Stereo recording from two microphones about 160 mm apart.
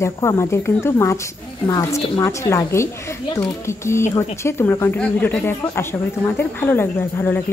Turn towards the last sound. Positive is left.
turn(degrees=10)  # may be behind; listen again after turning